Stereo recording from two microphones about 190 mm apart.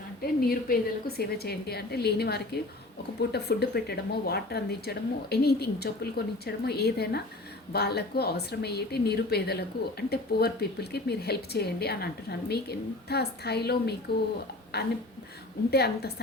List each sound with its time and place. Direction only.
0.2 s speech: 50° left (ahead or behind)